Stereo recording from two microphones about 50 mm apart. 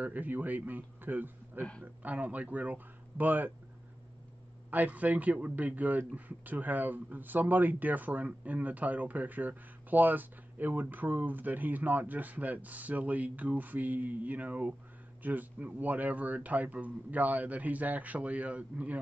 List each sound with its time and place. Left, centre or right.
0.0 s a man's voice: right
4.6 s speech: right